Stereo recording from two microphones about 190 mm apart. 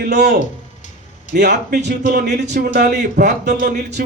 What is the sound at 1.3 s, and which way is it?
Speech, 55° right (ahead or behind).